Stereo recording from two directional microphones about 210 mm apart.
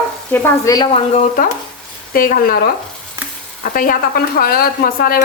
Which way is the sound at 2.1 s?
45° left (ahead or behind).